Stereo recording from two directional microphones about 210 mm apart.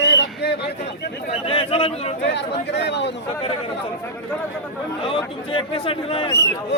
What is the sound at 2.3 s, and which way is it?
Speech, 55° left (ahead or behind).